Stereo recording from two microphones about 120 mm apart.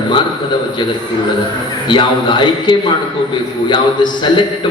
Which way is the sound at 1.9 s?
40° left (ahead or behind).